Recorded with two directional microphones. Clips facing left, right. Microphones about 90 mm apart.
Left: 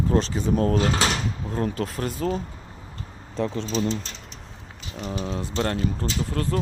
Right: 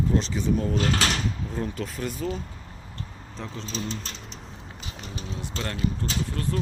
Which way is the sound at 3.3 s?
70° left (ahead or behind).